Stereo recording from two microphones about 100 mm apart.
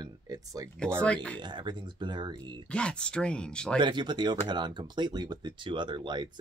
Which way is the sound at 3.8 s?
50° right (ahead or behind).